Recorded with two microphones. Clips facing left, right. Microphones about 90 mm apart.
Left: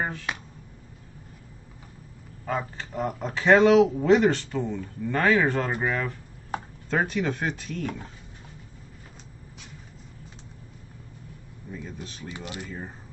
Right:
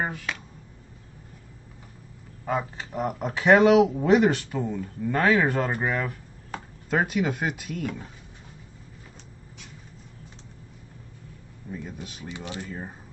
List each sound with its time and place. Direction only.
0.0 s speech: 10° right (ahead or behind)
2.4 s speech: 10° right (ahead or behind)
11.7 s speech: 10° right (ahead or behind)
12.3 s speech: 20° right (ahead or behind)